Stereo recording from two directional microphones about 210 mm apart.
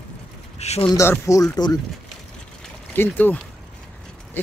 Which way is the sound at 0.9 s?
15° left (ahead or behind).